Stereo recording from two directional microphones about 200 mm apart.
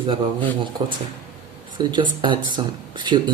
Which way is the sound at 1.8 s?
25° right (ahead or behind).